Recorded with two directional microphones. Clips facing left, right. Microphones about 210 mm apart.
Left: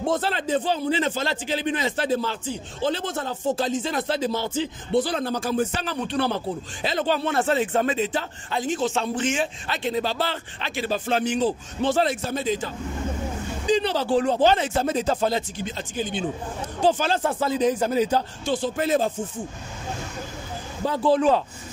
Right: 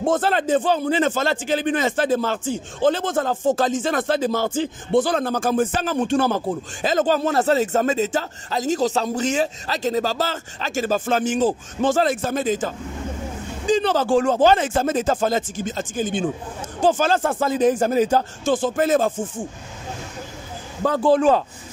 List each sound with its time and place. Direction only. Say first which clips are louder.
0.0 s speech: right 5 dB; 50° right (ahead or behind)
19.0 s a man's voice: right 3 dB; 90° right
20.8 s speech: right 3 dB; 50° right (ahead or behind)